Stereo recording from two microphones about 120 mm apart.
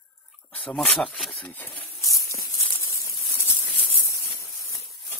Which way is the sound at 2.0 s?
25° left (ahead or behind).